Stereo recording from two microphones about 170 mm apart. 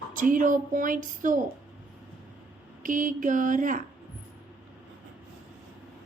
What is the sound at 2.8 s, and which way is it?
A woman's voice, 50° right (ahead or behind).